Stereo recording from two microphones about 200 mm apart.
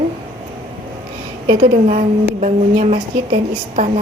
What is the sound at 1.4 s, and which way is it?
A woman's voice, 35° right (ahead or behind).